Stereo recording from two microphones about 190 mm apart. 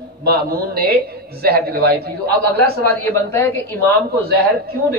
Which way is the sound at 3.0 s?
15° left (ahead or behind).